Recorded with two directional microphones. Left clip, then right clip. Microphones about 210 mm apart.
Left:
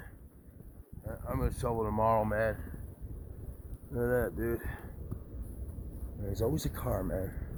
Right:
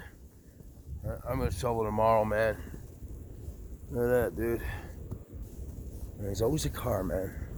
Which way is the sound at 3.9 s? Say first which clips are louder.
Right 4 dB; 10° right (ahead or behind).